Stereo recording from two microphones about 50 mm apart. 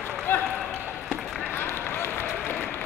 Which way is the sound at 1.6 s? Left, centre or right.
Left.